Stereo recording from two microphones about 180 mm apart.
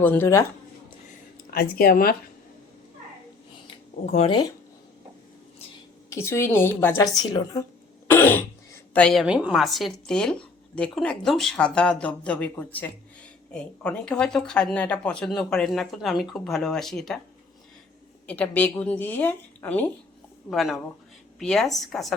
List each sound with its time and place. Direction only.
0.0 s a woman's voice: 10° left (ahead or behind)
1.5 s speech: 55° left (ahead or behind)
4.0 s speech: 35° left (ahead or behind)
6.1 s a woman's voice: 15° left (ahead or behind)
8.0 s throat clearing: 10° left (ahead or behind)
8.9 s a woman's voice: 5° left (ahead or behind)
18.3 s a woman's voice: 10° left (ahead or behind)